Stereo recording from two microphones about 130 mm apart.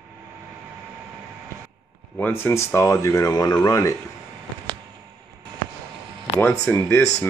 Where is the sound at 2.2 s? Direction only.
15° left (ahead or behind).